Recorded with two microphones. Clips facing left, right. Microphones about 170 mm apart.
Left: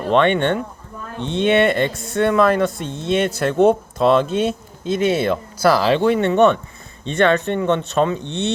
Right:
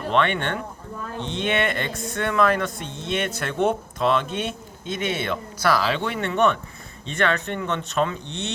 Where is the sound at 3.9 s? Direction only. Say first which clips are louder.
Left 7 dB; 30° left (ahead or behind).